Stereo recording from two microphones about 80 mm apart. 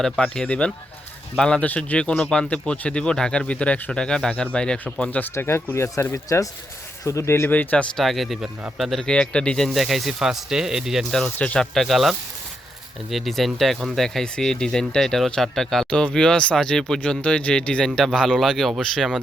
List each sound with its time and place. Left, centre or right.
0.0 s speech: centre
5.3 s speech: left
6.2 s speech: left
7.5 s speech: centre
7.9 s speech: centre
9.6 s speech: centre
11.3 s speech: centre
11.6 s speech: centre